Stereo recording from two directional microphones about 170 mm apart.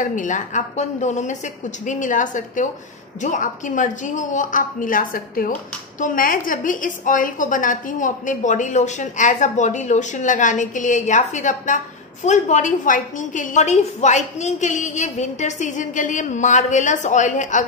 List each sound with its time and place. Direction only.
0.0 s a woman's voice: 50° left (ahead or behind)